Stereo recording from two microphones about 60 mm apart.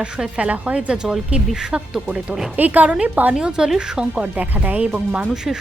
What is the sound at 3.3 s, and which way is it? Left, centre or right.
Speech, centre.